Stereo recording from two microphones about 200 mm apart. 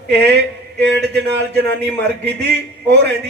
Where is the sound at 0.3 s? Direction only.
55° right (ahead or behind).